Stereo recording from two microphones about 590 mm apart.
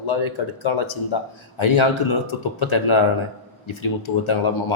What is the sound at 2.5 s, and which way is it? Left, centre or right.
A man's voice, left.